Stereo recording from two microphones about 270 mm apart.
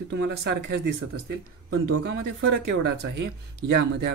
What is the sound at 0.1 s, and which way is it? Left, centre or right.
Speech, right.